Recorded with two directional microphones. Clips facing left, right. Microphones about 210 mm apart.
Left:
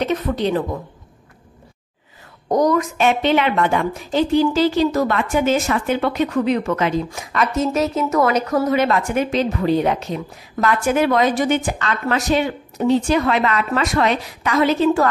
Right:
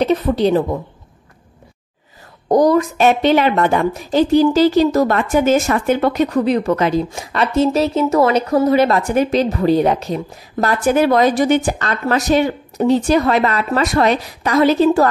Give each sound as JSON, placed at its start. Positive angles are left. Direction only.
{"t": 0.0, "sound": "a woman's voice", "side_deg": -35}
{"t": 2.4, "sound": "a woman's voice", "side_deg": -35}